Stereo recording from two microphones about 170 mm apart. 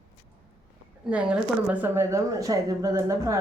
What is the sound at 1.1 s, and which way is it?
A woman's voice, 10° right (ahead or behind).